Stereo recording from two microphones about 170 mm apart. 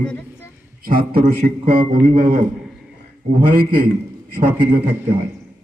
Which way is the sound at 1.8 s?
40° right (ahead or behind).